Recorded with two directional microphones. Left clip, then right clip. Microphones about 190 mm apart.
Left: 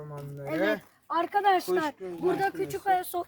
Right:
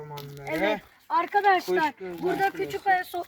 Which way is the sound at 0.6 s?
10° left (ahead or behind).